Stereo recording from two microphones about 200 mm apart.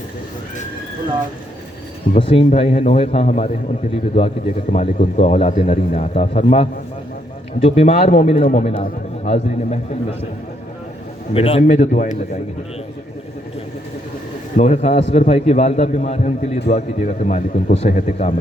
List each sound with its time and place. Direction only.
2.1 s a man's voice: 30° left (ahead or behind)
11.3 s a man's voice: 30° left (ahead or behind)
11.6 s a man's voice: 40° left (ahead or behind)
14.5 s a man's voice: 35° left (ahead or behind)